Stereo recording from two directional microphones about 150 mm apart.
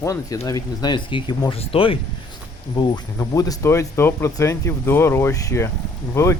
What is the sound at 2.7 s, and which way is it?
Speech, 25° left (ahead or behind).